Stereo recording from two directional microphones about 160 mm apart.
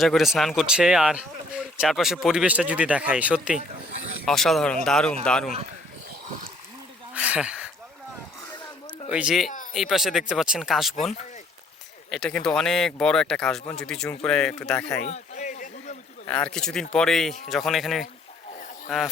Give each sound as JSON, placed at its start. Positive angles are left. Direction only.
{"t": 0.0, "sound": "speech", "side_deg": 0}
{"t": 7.1, "sound": "a sound", "side_deg": -10}
{"t": 9.0, "sound": "speech", "side_deg": -5}
{"t": 12.1, "sound": "speech", "side_deg": 5}
{"t": 15.0, "sound": "a sound", "side_deg": 45}
{"t": 16.2, "sound": "speech", "side_deg": 5}